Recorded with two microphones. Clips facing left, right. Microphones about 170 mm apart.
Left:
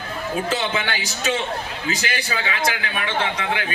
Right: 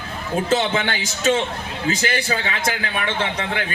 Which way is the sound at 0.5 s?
40° right (ahead or behind).